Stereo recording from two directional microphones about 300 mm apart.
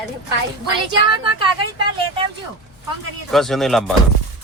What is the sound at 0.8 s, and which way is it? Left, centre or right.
Speech, centre.